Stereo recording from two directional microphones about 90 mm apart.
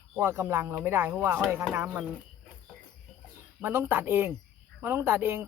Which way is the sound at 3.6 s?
25° right (ahead or behind).